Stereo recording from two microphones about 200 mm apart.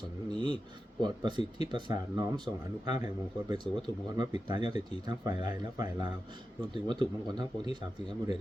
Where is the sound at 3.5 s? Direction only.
20° right (ahead or behind).